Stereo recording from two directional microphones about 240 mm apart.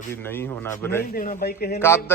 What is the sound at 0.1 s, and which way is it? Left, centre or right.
Speech, centre.